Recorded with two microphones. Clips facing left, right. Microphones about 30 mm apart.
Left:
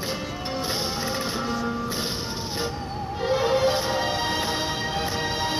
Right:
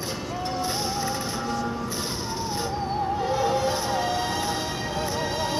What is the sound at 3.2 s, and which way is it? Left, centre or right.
Music, left.